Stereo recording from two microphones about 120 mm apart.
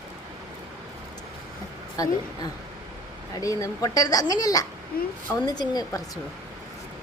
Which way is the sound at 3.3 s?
30° left (ahead or behind).